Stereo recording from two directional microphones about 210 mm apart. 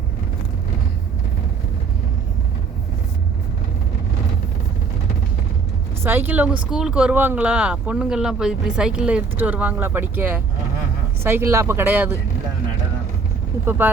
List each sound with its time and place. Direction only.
6.0 s speech: 10° right (ahead or behind)
13.7 s speech: 10° right (ahead or behind)